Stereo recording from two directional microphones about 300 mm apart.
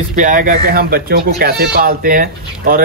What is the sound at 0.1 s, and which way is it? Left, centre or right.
Speech, right.